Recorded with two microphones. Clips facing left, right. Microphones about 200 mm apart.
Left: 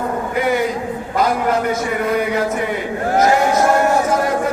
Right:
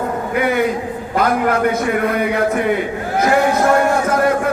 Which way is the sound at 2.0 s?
55° right (ahead or behind).